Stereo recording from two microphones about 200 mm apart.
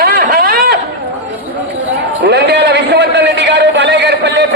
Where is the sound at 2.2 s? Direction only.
55° right (ahead or behind).